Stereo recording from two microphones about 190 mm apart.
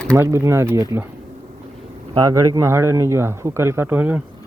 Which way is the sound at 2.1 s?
20° right (ahead or behind).